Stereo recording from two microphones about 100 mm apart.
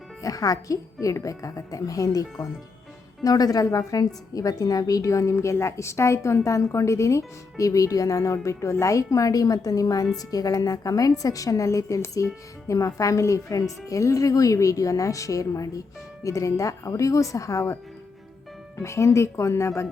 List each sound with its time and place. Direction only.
0.2 s a woman's voice: 35° left (ahead or behind)
3.2 s a woman's voice: 40° left (ahead or behind)
18.8 s speech: 30° left (ahead or behind)